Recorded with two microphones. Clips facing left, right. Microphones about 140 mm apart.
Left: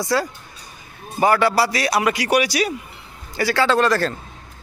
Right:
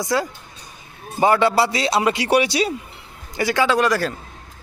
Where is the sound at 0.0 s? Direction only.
15° right (ahead or behind).